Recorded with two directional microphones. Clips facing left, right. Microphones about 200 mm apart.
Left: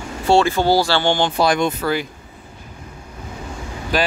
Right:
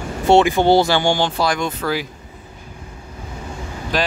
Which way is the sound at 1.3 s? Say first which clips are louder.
Left 3 dB; 20° left (ahead or behind).